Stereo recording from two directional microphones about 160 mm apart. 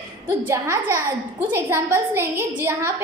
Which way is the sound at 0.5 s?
15° right (ahead or behind).